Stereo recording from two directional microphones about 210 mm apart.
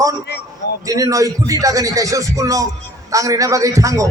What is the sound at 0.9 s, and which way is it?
Speech, 15° right (ahead or behind).